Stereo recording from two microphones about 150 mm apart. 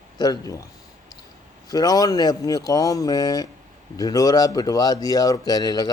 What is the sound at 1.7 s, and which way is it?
Speech, 25° left (ahead or behind).